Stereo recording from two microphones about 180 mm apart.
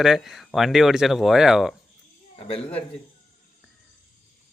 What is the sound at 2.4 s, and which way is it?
Speech, 35° left (ahead or behind).